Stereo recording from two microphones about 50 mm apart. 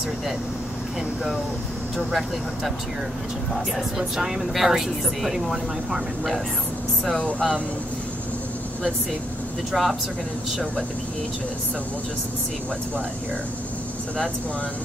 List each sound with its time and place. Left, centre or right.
4.2 s speech: centre
7.2 s speech: centre
9.7 s speech: centre